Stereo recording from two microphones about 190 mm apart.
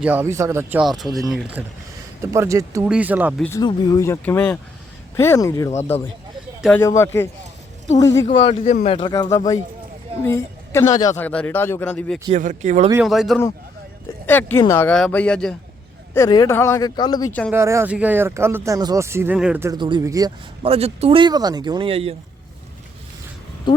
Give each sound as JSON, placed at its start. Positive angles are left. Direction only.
{"t": 0.0, "sound": "speech", "side_deg": -10}
{"t": 2.2, "sound": "speech", "side_deg": -15}
{"t": 3.3, "sound": "speech", "side_deg": 5}
{"t": 3.6, "sound": "speech", "side_deg": 20}
{"t": 6.7, "sound": "speech", "side_deg": 15}
{"t": 8.4, "sound": "a man's voice", "side_deg": 30}
{"t": 9.0, "sound": "a woman's voice", "side_deg": 20}
{"t": 11.2, "sound": "speech", "side_deg": 10}
{"t": 12.3, "sound": "speech", "side_deg": -40}
{"t": 13.1, "sound": "speech", "side_deg": 0}
{"t": 16.1, "sound": "speech", "side_deg": 20}
{"t": 17.5, "sound": "speech", "side_deg": -15}
{"t": 19.7, "sound": "speech", "side_deg": -25}